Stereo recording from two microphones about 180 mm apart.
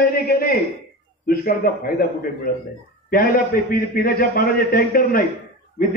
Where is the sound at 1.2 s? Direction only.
55° left (ahead or behind).